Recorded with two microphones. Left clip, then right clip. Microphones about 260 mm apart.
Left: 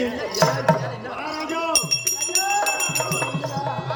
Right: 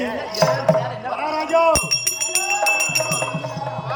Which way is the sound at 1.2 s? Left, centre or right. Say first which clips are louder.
Right 10 dB; centre.